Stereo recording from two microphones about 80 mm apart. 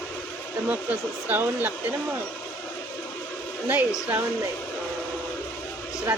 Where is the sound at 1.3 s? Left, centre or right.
Right.